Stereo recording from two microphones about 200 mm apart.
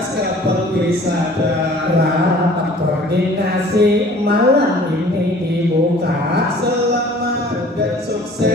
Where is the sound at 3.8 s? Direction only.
55° right (ahead or behind).